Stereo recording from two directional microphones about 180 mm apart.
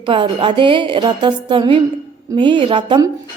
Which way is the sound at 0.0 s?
30° right (ahead or behind).